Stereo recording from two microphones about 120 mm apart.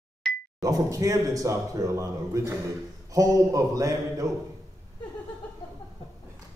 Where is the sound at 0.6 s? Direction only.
30° right (ahead or behind).